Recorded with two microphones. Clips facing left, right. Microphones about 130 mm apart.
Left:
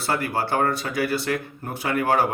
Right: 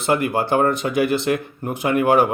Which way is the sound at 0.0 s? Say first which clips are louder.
Right 5 dB; 20° right (ahead or behind).